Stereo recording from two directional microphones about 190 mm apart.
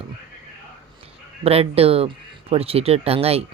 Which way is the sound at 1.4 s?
30° right (ahead or behind).